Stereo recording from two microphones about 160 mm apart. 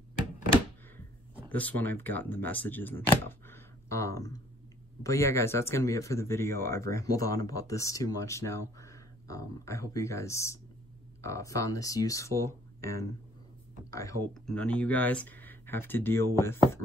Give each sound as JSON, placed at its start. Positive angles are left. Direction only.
{"t": 1.5, "sound": "speech", "side_deg": 10}
{"t": 14.3, "sound": "speech", "side_deg": 5}